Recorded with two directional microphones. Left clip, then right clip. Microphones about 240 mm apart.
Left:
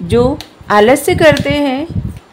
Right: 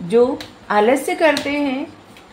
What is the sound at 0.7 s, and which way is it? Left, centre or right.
A woman's voice, left.